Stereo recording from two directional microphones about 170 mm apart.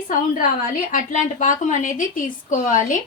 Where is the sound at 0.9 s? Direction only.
50° left (ahead or behind).